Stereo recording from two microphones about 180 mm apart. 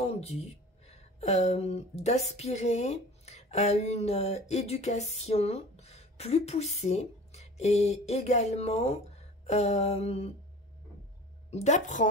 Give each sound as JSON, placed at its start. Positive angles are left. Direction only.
{"t": 0.0, "sound": "speech", "side_deg": 35}
{"t": 9.5, "sound": "a sound", "side_deg": 35}
{"t": 11.5, "sound": "a woman's voice", "side_deg": 40}